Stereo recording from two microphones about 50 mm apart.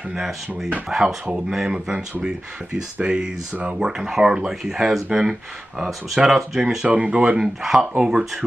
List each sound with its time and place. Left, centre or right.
0.8 s speech: centre
6.9 s speech: right
7.4 s speech: centre